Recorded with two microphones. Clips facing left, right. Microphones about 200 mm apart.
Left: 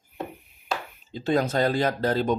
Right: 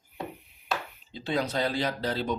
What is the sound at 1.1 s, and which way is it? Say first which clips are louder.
Speech: left 6 dB; 45° left (ahead or behind).